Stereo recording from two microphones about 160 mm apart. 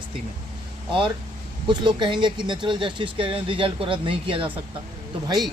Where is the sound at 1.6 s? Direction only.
30° right (ahead or behind).